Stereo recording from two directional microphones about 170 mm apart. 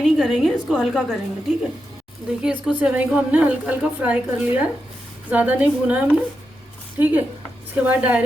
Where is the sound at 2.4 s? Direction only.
5° right (ahead or behind).